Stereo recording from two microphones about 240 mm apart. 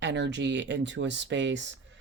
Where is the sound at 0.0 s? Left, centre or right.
Right.